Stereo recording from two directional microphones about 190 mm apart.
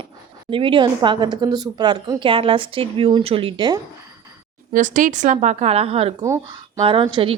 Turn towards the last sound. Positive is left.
turn(degrees=-25)  # may be behind; listen again after turning